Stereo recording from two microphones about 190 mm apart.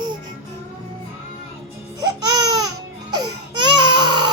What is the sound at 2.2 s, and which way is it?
Baby cry, 20° right (ahead or behind).